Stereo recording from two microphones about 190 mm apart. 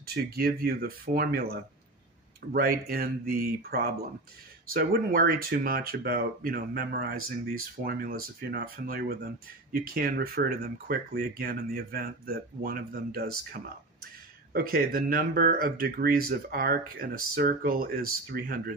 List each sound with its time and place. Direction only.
0.0 s speech: 55° right (ahead or behind)